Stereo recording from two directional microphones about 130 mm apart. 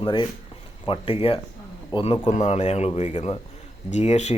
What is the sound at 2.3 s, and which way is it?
Speech, 60° left (ahead or behind).